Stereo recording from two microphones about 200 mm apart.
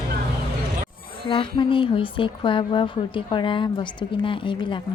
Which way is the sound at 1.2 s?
25° left (ahead or behind).